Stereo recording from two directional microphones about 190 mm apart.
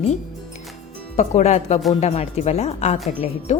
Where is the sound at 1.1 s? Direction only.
35° left (ahead or behind).